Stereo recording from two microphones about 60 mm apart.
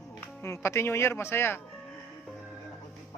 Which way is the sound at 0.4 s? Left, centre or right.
Left.